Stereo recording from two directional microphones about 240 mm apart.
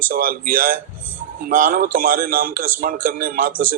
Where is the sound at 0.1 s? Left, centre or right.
Right.